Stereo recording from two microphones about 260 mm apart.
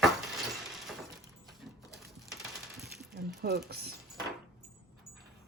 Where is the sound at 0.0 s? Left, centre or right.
Centre.